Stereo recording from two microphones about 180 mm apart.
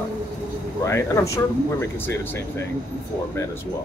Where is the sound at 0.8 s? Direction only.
15° left (ahead or behind).